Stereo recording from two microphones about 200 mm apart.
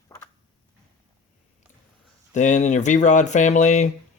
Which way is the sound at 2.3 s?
35° left (ahead or behind).